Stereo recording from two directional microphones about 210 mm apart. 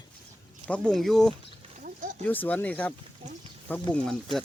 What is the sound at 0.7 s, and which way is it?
Speech, 5° left (ahead or behind).